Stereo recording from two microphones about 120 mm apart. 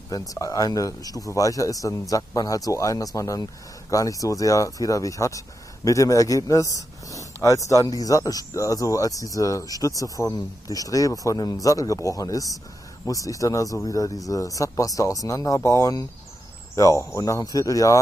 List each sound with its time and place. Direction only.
0.1 s a man's voice: 30° left (ahead or behind)